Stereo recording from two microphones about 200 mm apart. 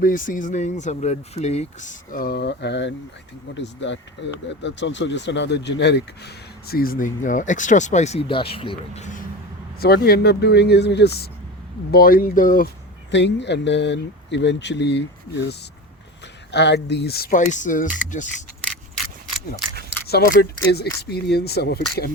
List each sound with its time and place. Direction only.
0.0 s speech: 40° left (ahead or behind); by 9.0 s 25° left (ahead or behind)
9.8 s speech: 50° left (ahead or behind)
13.1 s speech: 60° left (ahead or behind); by 18.3 s 40° left (ahead or behind)
20.1 s speech: 50° left (ahead or behind)